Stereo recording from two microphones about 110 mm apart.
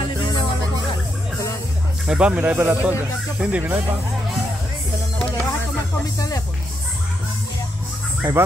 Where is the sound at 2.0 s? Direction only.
10° right (ahead or behind).